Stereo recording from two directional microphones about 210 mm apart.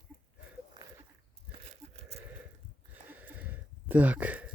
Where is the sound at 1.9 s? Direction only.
30° right (ahead or behind).